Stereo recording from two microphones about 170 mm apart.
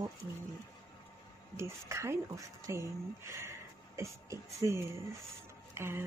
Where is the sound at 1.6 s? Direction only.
15° right (ahead or behind).